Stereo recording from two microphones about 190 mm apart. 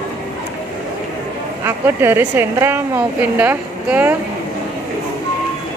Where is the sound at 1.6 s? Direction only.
10° right (ahead or behind).